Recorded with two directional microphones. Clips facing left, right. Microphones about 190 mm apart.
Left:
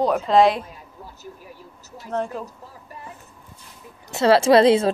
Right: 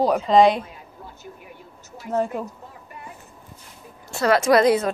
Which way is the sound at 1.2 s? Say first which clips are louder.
Left 1 dB; 35° left (ahead or behind).